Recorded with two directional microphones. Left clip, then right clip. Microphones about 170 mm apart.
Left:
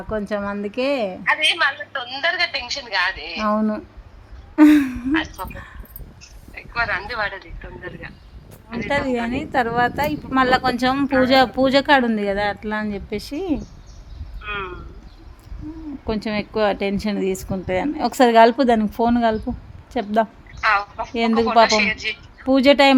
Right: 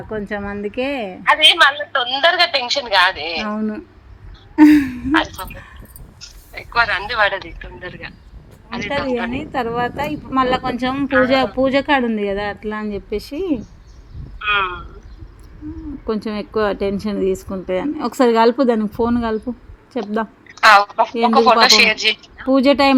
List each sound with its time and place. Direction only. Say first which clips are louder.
0.1 s a woman's voice: left 1 dB; 10° left (ahead or behind)
1.2 s a woman's voice: right 8 dB; 40° right (ahead or behind)
3.5 s a woman's voice: left 3 dB; 10° left (ahead or behind)
6.1 s a sound: right 5 dB; 55° right (ahead or behind)
7.8 s a man's voice: right 3 dB; 60° right (ahead or behind)
9.3 s a woman's voice: left 1 dB; 15° left (ahead or behind)
11.3 s a woman's voice: even; 15° left (ahead or behind)
14.3 s a sound: right 11 dB; 65° right (ahead or behind)
16.0 s a woman's voice: right 1 dB; 10° left (ahead or behind)
20.7 s a woman's voice: right 9 dB; 55° right (ahead or behind)
22.4 s a woman's voice: even; 15° left (ahead or behind)